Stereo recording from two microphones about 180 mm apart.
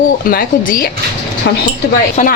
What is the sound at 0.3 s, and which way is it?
Speech, 55° left (ahead or behind).